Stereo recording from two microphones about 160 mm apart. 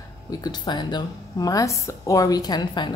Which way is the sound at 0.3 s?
25° left (ahead or behind).